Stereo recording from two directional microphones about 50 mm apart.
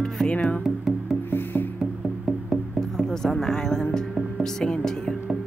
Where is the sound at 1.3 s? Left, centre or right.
Left.